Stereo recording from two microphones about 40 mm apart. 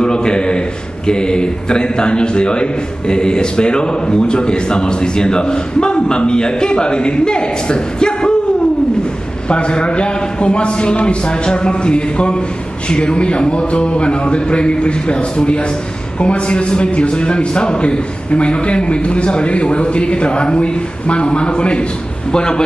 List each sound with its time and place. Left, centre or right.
0.0 s a man's voice: left
9.5 s a man's voice: left